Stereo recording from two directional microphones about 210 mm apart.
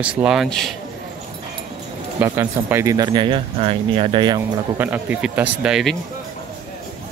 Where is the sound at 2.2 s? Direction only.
10° right (ahead or behind).